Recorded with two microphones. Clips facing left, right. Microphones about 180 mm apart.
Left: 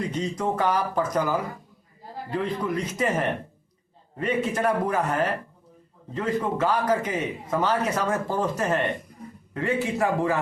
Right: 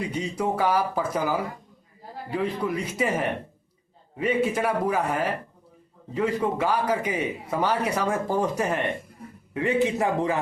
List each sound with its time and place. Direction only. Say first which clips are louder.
0.1 s a man's voice: even; 10° right (ahead or behind)
6.1 s a man's voice: right 1 dB; 10° right (ahead or behind)